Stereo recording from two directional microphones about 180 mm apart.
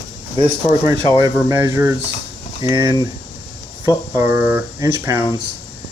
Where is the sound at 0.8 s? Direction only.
20° right (ahead or behind).